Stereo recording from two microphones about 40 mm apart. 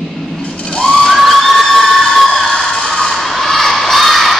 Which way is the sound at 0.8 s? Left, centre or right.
Centre.